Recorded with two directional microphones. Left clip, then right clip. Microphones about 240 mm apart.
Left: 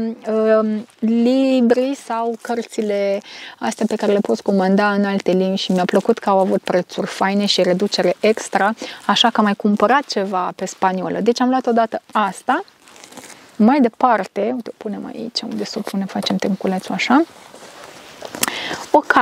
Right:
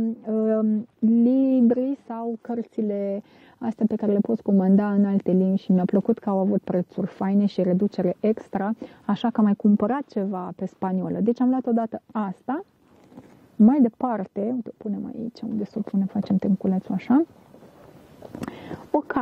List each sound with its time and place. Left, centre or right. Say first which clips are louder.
0.2 s speech: left 10 dB; centre
15.5 s speech: left 5 dB; centre